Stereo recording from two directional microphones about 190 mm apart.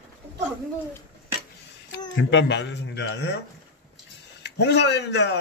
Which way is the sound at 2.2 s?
70° left (ahead or behind).